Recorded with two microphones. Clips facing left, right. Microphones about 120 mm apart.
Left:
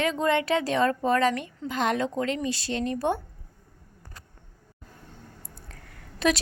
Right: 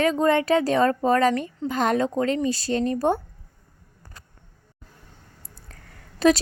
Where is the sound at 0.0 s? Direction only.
40° right (ahead or behind).